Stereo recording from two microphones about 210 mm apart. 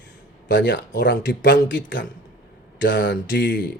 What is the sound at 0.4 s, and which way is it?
Speech, 55° left (ahead or behind).